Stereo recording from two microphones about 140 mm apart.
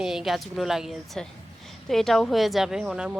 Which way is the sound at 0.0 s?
5° right (ahead or behind).